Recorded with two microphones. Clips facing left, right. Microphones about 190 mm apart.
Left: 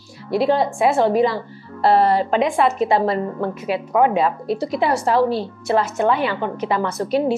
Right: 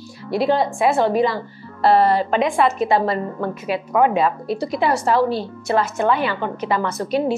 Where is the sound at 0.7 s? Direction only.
25° left (ahead or behind).